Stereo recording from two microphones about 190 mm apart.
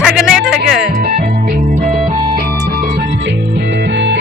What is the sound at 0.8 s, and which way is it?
Music, 55° right (ahead or behind).